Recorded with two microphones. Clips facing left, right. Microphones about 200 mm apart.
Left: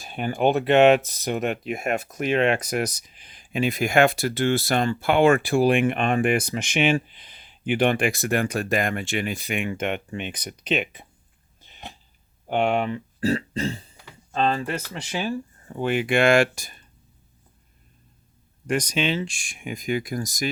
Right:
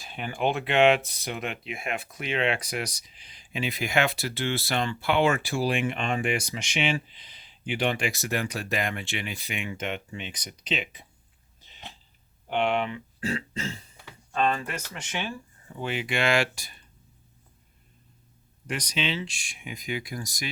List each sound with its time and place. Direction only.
0.0 s speech: 45° left (ahead or behind)
11.6 s a sound: 50° left (ahead or behind)
12.5 s speech: 45° left (ahead or behind)
18.7 s speech: 50° left (ahead or behind)